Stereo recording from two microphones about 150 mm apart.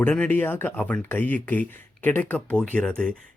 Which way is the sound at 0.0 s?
10° left (ahead or behind).